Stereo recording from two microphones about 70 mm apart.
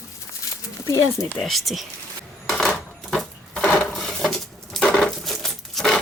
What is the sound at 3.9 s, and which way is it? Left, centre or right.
Dishes, centre.